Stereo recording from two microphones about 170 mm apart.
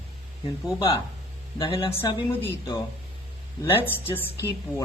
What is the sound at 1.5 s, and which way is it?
Speech, 30° left (ahead or behind).